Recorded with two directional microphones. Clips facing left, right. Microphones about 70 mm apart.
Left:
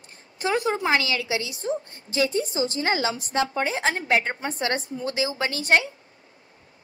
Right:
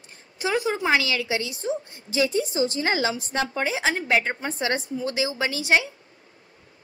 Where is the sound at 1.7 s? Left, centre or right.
Left.